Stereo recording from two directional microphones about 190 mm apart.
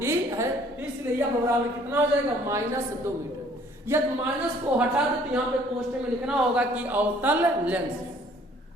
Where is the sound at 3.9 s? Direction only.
10° right (ahead or behind).